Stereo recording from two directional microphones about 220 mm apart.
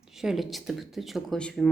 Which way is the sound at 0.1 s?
Centre (ahead or behind).